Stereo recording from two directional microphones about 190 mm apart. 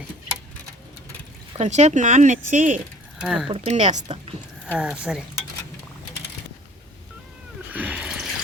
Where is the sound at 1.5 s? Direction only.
35° right (ahead or behind).